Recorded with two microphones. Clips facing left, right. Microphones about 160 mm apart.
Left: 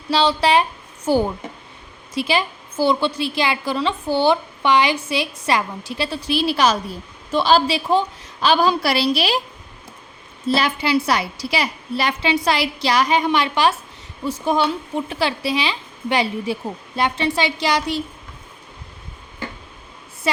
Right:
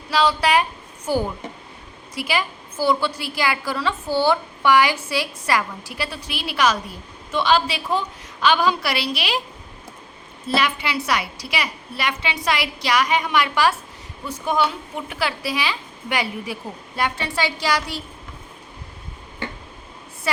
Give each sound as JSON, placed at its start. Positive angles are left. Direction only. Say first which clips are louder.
{"t": 0.1, "sound": "a woman's voice", "louder": "left 2 dB", "side_deg": 30}
{"t": 10.5, "sound": "a woman's voice", "louder": "left 4 dB", "side_deg": 35}
{"t": 20.3, "sound": "a woman's voice", "louder": "left 2 dB", "side_deg": 20}